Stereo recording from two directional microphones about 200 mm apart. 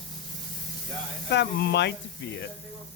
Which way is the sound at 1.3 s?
60° left (ahead or behind).